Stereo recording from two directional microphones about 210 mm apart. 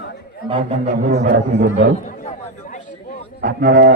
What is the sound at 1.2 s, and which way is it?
Speech, 35° right (ahead or behind).